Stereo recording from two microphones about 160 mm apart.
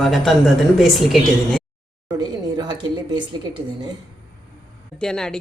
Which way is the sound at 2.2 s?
25° right (ahead or behind).